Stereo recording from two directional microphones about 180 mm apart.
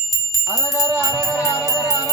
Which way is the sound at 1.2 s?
15° left (ahead or behind).